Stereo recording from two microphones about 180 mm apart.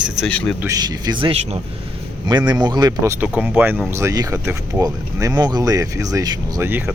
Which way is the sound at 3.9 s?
15° right (ahead or behind).